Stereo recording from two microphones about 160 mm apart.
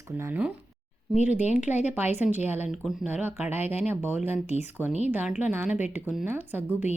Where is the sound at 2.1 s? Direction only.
45° left (ahead or behind).